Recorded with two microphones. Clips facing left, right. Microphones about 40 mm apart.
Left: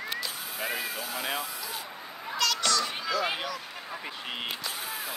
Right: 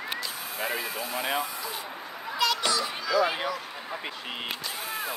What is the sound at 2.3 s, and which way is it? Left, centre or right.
Children playing, centre.